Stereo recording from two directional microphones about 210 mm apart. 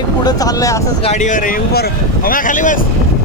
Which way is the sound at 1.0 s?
35° left (ahead or behind).